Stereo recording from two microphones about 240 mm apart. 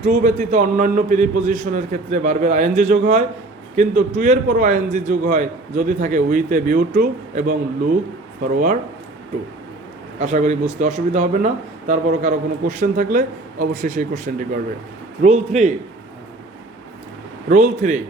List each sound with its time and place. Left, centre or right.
0.0 s speech: right
10.2 s a man's voice: right
17.5 s speech: right